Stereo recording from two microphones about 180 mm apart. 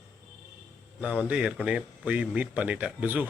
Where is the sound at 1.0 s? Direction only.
5° right (ahead or behind).